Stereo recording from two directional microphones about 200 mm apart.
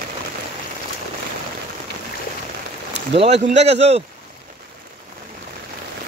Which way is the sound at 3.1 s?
30° right (ahead or behind).